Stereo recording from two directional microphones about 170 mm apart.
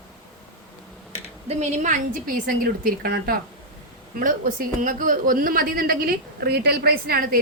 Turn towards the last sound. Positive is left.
turn(degrees=-60)  # may be behind; listen again after turning